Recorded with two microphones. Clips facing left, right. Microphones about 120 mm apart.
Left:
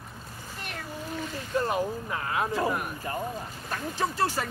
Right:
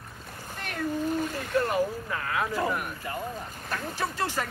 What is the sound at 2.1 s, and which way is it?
Speech, 25° left (ahead or behind).